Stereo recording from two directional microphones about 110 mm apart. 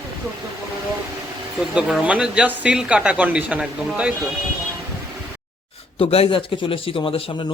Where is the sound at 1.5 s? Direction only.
5° right (ahead or behind).